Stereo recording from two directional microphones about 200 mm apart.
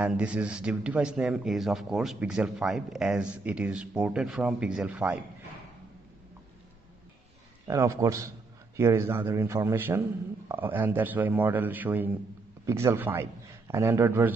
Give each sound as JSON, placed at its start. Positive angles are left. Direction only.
{"t": 0.0, "sound": "speech", "side_deg": -5}
{"t": 7.6, "sound": "a man's voice", "side_deg": -15}